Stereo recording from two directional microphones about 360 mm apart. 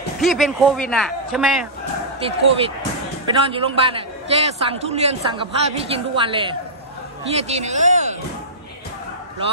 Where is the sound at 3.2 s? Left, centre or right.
Centre.